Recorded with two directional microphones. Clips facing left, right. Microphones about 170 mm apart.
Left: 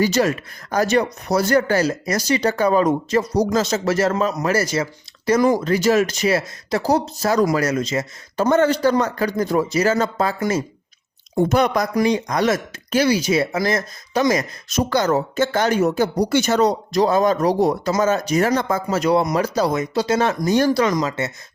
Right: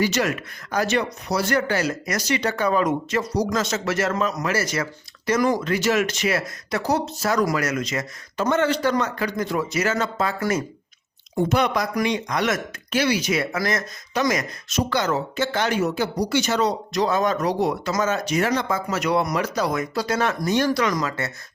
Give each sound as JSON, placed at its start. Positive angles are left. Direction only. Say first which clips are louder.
{"t": 0.0, "sound": "speech", "louder": "left 4 dB", "side_deg": 35}
{"t": 11.3, "sound": "speech", "louder": "left 4 dB", "side_deg": 45}
{"t": 14.8, "sound": "speech", "louder": "left 4 dB", "side_deg": 40}
{"t": 18.9, "sound": "speech", "louder": "left 5 dB", "side_deg": 30}